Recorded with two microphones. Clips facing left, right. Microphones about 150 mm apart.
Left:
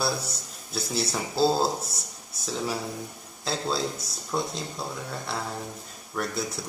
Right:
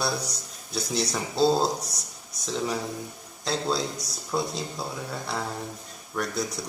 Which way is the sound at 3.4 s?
Centre (ahead or behind).